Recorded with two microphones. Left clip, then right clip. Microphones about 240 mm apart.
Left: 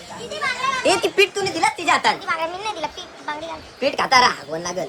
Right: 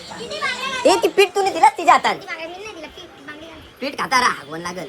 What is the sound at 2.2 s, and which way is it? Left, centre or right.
Speech, left.